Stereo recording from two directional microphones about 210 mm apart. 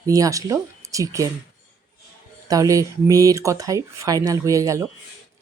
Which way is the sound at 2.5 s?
15° right (ahead or behind).